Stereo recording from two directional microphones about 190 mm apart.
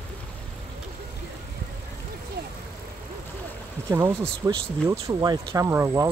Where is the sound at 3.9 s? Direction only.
15° right (ahead or behind).